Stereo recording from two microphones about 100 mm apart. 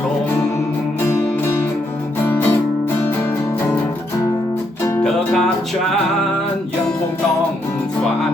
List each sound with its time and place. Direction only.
2.2 s music: 20° left (ahead or behind)